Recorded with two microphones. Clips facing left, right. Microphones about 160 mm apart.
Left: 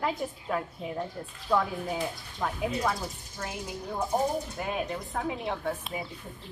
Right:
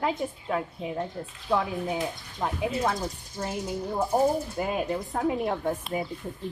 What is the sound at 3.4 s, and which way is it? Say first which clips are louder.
Speech: right 5 dB; 20° right (ahead or behind).